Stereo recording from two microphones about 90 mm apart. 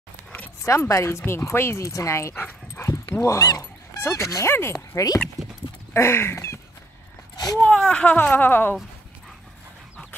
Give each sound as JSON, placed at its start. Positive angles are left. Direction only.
{"t": 0.7, "sound": "speech", "side_deg": 35}
{"t": 2.4, "sound": "dog", "side_deg": 25}
{"t": 3.1, "sound": "speech", "side_deg": 30}
{"t": 5.9, "sound": "a sound", "side_deg": 25}
{"t": 7.6, "sound": "speech", "side_deg": 10}